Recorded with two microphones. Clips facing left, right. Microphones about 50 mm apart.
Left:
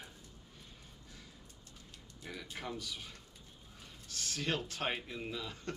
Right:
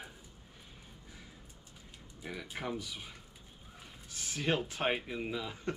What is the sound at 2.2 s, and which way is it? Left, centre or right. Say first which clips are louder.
Speech: right 4 dB; centre.